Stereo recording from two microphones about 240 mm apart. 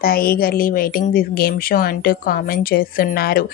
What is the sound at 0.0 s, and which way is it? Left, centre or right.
Speech, left.